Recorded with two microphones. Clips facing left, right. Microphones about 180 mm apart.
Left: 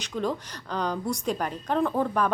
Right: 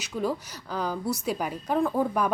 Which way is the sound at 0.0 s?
10° right (ahead or behind).